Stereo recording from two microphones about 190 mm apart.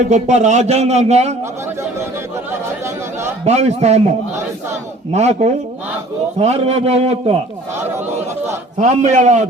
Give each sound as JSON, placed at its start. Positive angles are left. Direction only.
{"t": 0.0, "sound": "a man's voice", "side_deg": -40}
{"t": 3.4, "sound": "a man's voice", "side_deg": -35}
{"t": 5.1, "sound": "a man's voice", "side_deg": -35}
{"t": 8.8, "sound": "a man's voice", "side_deg": -40}